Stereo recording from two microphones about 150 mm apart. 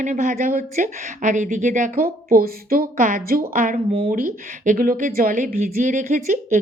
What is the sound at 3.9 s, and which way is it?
Speech, 40° right (ahead or behind).